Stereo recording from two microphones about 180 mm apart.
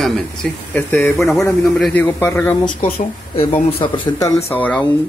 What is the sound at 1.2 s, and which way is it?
Speech, 15° left (ahead or behind).